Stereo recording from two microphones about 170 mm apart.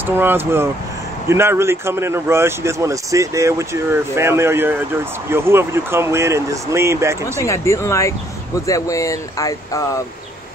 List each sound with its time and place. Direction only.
0.0 s speech: 10° right (ahead or behind)
7.4 s speech: 15° left (ahead or behind)